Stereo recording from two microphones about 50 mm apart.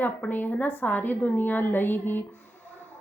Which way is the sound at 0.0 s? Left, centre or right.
Left.